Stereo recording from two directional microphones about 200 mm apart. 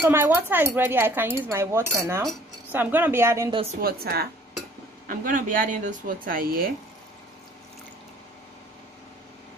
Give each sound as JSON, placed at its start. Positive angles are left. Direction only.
{"t": 0.0, "sound": "speech", "side_deg": -10}
{"t": 3.8, "sound": "speech", "side_deg": -50}